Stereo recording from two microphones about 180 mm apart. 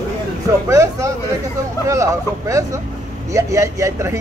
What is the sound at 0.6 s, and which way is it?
Speech, 15° right (ahead or behind).